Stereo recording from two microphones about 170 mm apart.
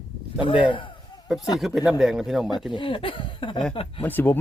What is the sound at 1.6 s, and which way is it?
Speech, 5° right (ahead or behind).